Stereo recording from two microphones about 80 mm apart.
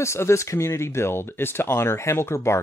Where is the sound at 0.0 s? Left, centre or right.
Left.